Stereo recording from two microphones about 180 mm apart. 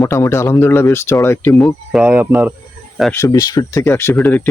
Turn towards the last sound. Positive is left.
turn(degrees=10)  # may be behind; listen again after turning